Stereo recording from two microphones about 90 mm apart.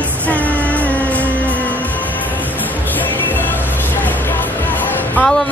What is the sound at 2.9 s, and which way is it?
Music, 20° left (ahead or behind).